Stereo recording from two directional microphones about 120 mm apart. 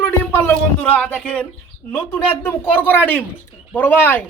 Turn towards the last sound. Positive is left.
turn(degrees=15)  # may be behind; listen again after turning